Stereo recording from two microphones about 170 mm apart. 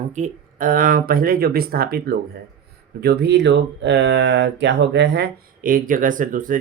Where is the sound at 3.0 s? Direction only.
75° right (ahead or behind).